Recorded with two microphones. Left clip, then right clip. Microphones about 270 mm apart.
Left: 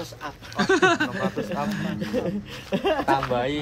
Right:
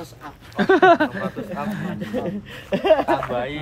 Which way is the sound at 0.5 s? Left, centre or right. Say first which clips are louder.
Right 6 dB; centre.